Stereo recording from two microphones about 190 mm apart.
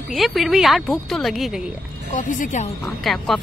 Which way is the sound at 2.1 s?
40° left (ahead or behind).